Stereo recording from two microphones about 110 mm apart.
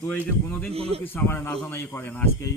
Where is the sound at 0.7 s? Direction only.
65° right (ahead or behind).